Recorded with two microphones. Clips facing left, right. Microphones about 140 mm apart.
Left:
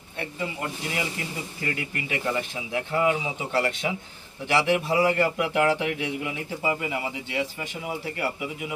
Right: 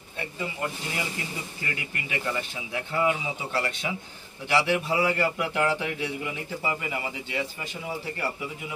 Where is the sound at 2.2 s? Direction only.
10° left (ahead or behind).